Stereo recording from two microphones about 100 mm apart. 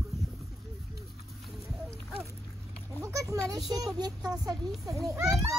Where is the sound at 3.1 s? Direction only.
35° right (ahead or behind).